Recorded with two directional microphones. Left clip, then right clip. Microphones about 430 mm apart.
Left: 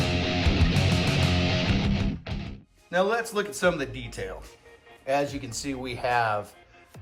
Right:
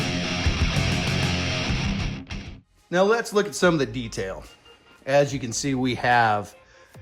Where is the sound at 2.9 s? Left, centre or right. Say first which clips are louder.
Right 4 dB; centre.